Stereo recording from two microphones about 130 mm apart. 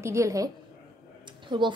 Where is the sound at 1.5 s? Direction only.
35° right (ahead or behind).